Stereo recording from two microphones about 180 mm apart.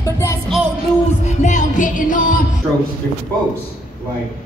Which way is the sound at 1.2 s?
40° left (ahead or behind).